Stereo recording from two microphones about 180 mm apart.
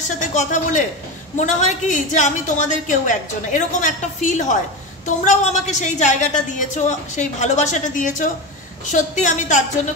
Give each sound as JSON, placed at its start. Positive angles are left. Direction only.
{"t": 0.2, "sound": "a woman's voice", "side_deg": 45}